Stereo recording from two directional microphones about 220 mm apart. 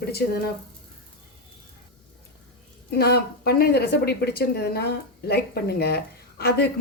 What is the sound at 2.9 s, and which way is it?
A woman's voice, 45° left (ahead or behind).